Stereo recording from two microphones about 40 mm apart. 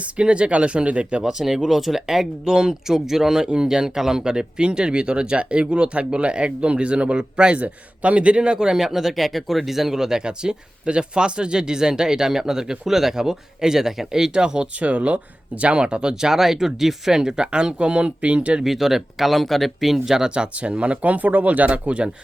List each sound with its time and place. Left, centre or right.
0.0 s speech: right
1.2 s a man's voice: centre
2.4 s a man's voice: centre
14.8 s speech: right
18.6 s speech: centre
20.3 s speech: right